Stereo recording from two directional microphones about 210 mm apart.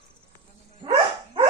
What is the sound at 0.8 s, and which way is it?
Dog, 15° right (ahead or behind).